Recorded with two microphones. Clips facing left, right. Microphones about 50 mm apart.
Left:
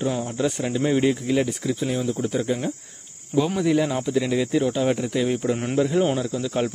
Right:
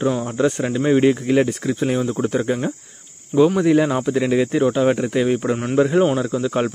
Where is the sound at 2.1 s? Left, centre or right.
Right.